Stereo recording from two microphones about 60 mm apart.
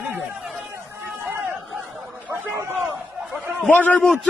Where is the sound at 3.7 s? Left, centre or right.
Left.